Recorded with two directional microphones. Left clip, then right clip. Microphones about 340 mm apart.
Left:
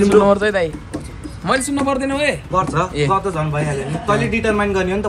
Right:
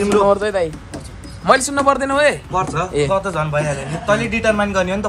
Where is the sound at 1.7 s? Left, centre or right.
Centre.